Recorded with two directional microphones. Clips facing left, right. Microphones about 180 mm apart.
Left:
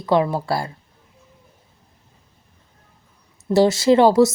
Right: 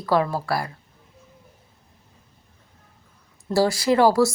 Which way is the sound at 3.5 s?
20° left (ahead or behind).